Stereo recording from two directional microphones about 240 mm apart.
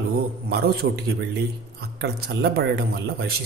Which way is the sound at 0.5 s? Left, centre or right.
Right.